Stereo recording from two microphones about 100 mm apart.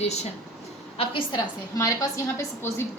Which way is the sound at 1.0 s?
60° left (ahead or behind).